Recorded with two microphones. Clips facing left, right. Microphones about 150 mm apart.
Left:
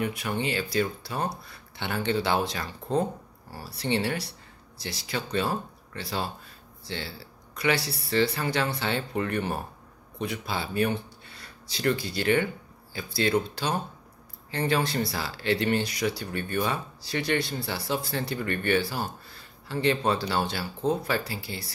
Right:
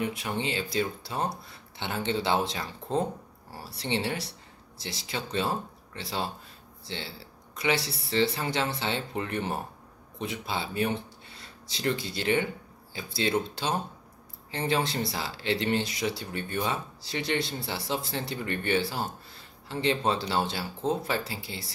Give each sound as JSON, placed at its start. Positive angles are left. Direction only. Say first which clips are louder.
{"t": 0.0, "sound": "speech", "louder": "left 2 dB", "side_deg": -25}